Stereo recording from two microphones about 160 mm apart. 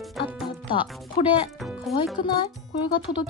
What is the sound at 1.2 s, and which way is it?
Speech, 40° left (ahead or behind).